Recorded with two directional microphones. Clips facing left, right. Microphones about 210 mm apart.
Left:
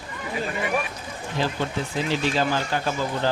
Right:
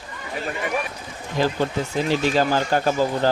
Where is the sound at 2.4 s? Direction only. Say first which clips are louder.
Right 4 dB; 45° right (ahead or behind).